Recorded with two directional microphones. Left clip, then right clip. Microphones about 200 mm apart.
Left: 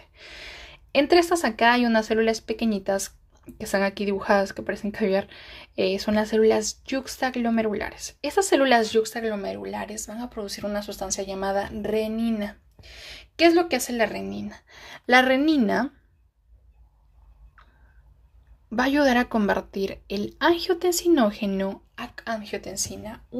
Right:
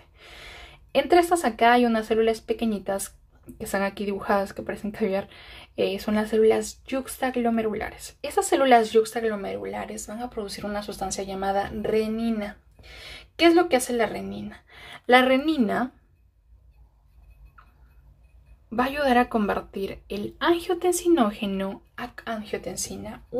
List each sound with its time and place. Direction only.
0.0 s speech: 30° left (ahead or behind)
18.8 s speech: 30° left (ahead or behind)